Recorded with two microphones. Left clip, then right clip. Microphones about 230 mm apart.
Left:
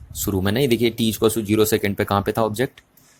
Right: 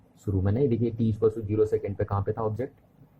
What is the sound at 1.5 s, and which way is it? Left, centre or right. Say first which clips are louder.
Speech: left 6 dB; left.